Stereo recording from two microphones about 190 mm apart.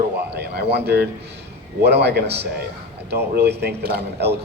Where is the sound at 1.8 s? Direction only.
60° right (ahead or behind).